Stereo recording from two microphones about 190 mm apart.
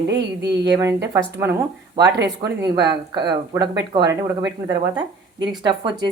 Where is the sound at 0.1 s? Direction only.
60° right (ahead or behind).